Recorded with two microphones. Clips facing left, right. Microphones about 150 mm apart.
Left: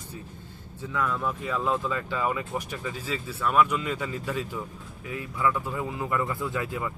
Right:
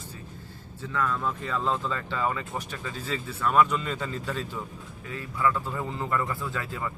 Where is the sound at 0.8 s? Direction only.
10° left (ahead or behind).